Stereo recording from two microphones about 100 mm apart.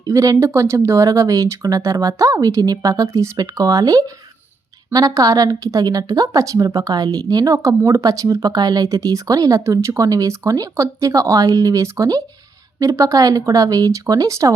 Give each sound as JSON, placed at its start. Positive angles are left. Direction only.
{"t": 0.0, "sound": "a woman's voice", "side_deg": -35}